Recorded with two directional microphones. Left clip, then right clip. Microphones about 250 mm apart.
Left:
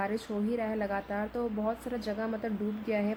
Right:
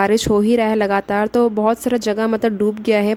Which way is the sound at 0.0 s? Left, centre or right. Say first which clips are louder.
Right 18 dB; right.